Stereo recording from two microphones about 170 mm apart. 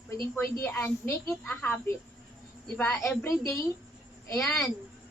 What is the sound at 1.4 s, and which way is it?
Speech, 5° left (ahead or behind).